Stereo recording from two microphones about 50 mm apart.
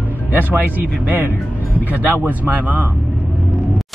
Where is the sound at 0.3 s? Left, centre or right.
Right.